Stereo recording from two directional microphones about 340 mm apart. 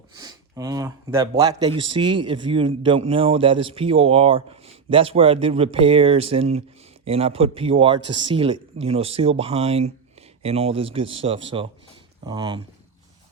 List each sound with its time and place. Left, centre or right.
0.1 s speech: centre